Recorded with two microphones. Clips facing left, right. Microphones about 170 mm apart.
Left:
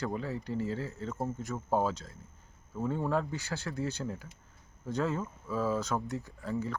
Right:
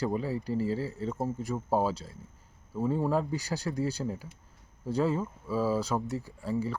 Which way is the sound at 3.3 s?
35° right (ahead or behind).